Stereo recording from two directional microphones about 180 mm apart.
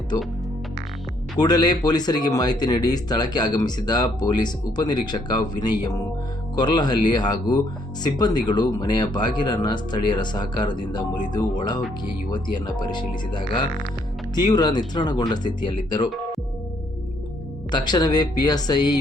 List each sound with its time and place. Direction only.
1.4 s speech: 20° left (ahead or behind)
17.7 s speech: 25° left (ahead or behind)